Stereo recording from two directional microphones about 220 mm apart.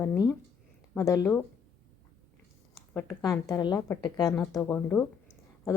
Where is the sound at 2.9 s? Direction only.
10° left (ahead or behind).